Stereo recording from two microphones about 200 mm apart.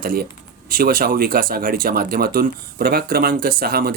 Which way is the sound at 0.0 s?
45° right (ahead or behind).